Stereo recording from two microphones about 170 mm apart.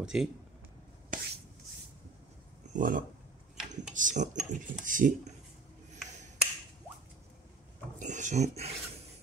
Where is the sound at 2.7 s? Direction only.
50° right (ahead or behind).